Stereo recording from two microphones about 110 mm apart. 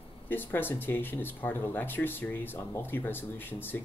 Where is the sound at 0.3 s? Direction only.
20° left (ahead or behind).